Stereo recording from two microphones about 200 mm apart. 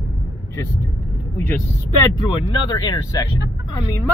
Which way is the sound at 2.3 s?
20° left (ahead or behind).